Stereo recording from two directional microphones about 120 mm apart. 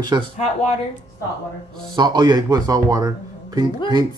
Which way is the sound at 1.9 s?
35° right (ahead or behind).